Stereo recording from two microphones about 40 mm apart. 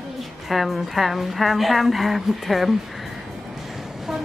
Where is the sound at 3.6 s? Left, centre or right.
Centre.